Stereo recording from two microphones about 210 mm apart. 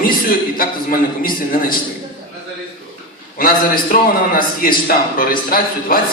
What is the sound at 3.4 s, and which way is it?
A man's voice, 40° left (ahead or behind).